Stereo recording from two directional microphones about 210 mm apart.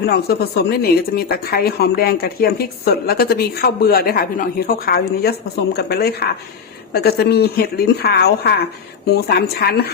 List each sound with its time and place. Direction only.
0.0 s speech: 50° left (ahead or behind)